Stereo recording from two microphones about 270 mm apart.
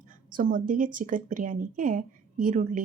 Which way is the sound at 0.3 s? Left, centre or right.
Right.